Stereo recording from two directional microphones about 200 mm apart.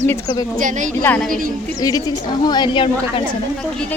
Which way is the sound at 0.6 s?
40° right (ahead or behind).